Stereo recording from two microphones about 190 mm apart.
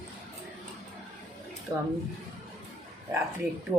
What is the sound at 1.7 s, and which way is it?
Speech, 15° right (ahead or behind).